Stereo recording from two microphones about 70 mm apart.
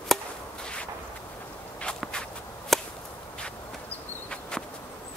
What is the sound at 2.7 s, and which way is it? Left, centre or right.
Chop, centre.